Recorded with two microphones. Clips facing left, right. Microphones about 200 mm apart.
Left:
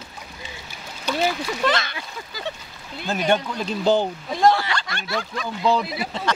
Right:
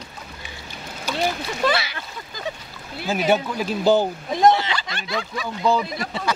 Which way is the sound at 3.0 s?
5° right (ahead or behind).